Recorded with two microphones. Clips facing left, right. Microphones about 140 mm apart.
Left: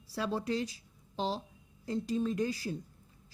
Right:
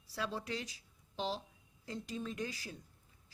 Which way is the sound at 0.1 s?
35° left (ahead or behind).